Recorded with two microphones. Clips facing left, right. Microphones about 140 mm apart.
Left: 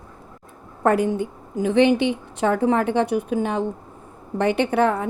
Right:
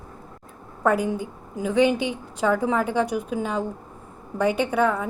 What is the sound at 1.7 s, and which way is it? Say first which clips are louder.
A woman's voice: left 3 dB; 65° left (ahead or behind).